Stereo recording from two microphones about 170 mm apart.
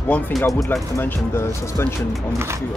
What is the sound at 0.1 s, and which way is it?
Speech, 5° left (ahead or behind).